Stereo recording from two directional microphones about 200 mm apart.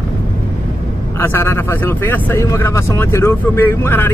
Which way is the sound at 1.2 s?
10° left (ahead or behind).